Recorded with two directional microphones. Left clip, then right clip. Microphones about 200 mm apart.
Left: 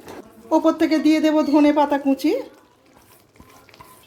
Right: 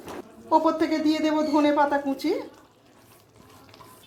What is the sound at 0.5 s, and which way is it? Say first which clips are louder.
A woman's voice: left 4 dB; 30° left (ahead or behind).